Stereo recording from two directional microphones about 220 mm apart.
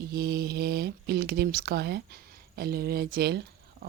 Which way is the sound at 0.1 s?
45° right (ahead or behind).